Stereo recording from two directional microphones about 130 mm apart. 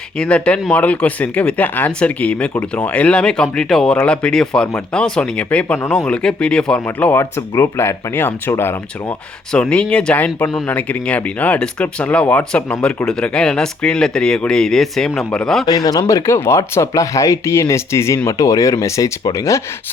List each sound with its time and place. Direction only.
0.2 s speech: 10° left (ahead or behind)
15.6 s speech: 30° left (ahead or behind)